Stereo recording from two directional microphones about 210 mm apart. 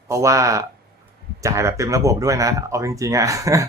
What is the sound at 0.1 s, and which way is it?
A man's voice, 15° right (ahead or behind).